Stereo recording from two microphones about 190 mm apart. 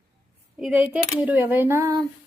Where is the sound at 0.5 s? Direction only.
5° right (ahead or behind).